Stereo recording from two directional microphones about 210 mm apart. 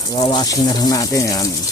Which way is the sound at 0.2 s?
20° left (ahead or behind).